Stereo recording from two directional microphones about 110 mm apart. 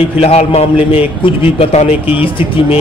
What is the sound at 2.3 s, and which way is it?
Speech, 55° left (ahead or behind).